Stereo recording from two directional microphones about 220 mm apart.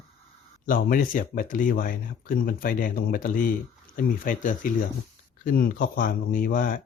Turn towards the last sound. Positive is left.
turn(degrees=40)  # may be behind; listen again after turning